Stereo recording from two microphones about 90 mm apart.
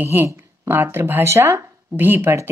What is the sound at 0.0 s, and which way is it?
Speech, 25° right (ahead or behind).